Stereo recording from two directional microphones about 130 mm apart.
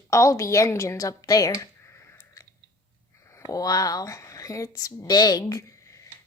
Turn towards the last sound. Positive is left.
turn(degrees=25)  # may be behind; listen again after turning